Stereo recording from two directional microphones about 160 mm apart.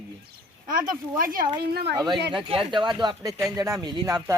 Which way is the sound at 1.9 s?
25° right (ahead or behind).